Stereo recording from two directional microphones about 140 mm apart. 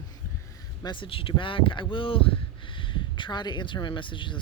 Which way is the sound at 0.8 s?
35° left (ahead or behind).